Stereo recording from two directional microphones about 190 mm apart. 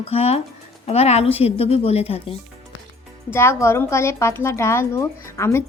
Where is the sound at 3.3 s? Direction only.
15° left (ahead or behind).